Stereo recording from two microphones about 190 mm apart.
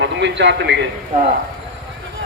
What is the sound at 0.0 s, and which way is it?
Speech, 70° right (ahead or behind).